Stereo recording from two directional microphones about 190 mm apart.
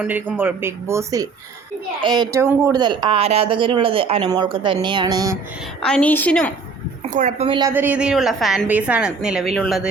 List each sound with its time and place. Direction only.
0.3 s speech: 10° right (ahead or behind)
5.8 s a woman's voice: 5° left (ahead or behind)
7.1 s speech: 40° right (ahead or behind)
7.7 s a woman's voice: 10° right (ahead or behind)